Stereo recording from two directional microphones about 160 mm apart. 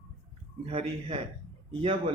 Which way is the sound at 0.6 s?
35° right (ahead or behind).